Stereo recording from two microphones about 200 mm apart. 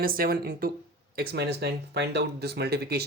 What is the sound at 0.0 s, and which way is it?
Speech, 45° right (ahead or behind).